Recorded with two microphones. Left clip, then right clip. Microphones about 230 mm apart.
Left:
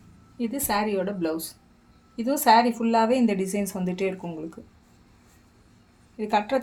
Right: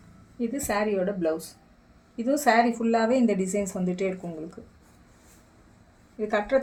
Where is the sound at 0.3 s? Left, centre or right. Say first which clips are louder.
Left 1 dB; left.